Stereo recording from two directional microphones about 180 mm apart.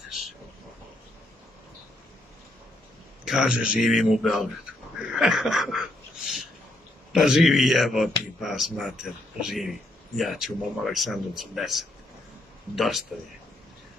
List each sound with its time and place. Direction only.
3.3 s speech: 5° right (ahead or behind)
5.1 s a sound: 5° right (ahead or behind)
7.1 s speech: centre (ahead or behind)